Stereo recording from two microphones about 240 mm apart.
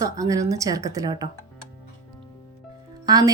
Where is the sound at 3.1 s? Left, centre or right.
Centre.